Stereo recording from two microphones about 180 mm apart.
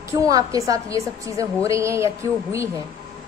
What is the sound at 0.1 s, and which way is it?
A woman's voice, 20° right (ahead or behind).